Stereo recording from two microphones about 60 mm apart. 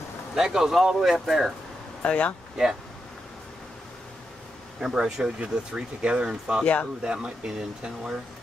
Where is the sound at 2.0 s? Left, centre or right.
Centre.